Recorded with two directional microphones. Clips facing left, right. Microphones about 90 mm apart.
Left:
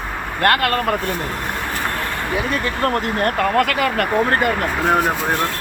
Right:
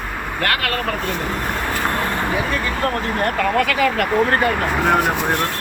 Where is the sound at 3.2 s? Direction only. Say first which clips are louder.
Left 1 dB; 40° left (ahead or behind).